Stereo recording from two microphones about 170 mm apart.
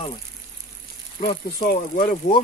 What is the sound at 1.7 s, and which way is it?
Speech, 55° left (ahead or behind).